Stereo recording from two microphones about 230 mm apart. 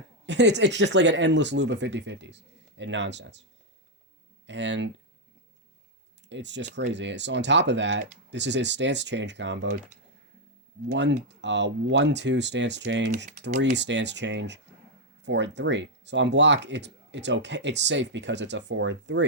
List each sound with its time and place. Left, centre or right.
0.3 s speech: right
4.4 s speech: right
6.2 s speech: right
10.9 s speech: right